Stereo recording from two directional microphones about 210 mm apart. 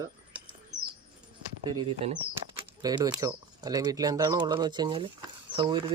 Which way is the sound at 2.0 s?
25° right (ahead or behind).